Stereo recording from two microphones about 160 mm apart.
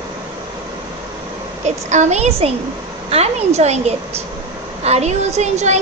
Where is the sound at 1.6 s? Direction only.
45° right (ahead or behind).